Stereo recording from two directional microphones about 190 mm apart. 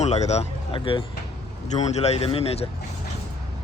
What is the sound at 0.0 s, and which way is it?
A man's voice, 35° left (ahead or behind).